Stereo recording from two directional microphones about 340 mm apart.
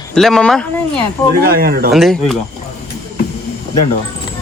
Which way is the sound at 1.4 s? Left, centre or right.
Right.